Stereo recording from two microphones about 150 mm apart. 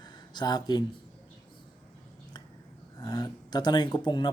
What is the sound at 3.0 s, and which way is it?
Speech, 25° left (ahead or behind).